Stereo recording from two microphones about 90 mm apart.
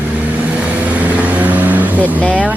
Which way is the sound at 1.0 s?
15° right (ahead or behind).